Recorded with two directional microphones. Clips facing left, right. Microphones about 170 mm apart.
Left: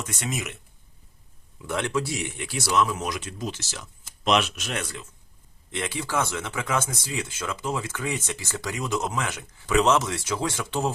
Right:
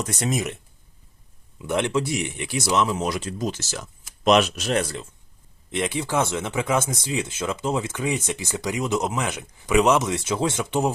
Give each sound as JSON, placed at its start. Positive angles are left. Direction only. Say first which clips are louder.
{"t": 0.0, "sound": "speech", "louder": "right 6 dB", "side_deg": -35}
{"t": 1.5, "sound": "speech", "louder": "right 4 dB", "side_deg": -20}
{"t": 5.7, "sound": "speech", "louder": "right 4 dB", "side_deg": -20}